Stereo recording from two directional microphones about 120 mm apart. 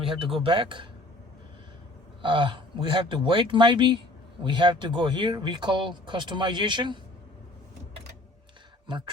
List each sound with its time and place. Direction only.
0.0 s speech: 45° right (ahead or behind)
2.2 s speech: 40° right (ahead or behind)
8.9 s speech: 40° right (ahead or behind)